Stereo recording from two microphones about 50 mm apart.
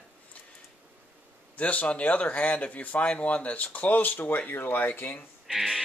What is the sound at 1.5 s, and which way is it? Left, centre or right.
Speech, left.